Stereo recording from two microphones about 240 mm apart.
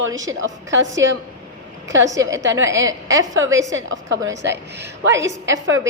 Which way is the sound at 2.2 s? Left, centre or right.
Right.